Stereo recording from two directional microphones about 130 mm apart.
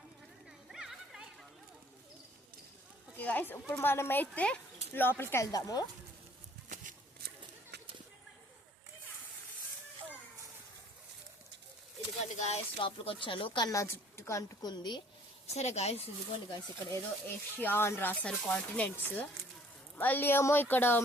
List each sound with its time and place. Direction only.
0.7 s a sound: 5° right (ahead or behind)
3.2 s a woman's voice: 15° left (ahead or behind)
12.2 s a sound: 60° left (ahead or behind)
12.8 s speech: 40° left (ahead or behind)
13.7 s a woman's voice: 25° left (ahead or behind)
15.5 s speech: 55° left (ahead or behind)
16.5 s speech: 20° left (ahead or behind)